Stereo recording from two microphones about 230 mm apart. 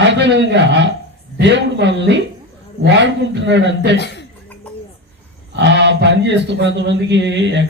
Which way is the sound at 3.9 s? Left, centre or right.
Left.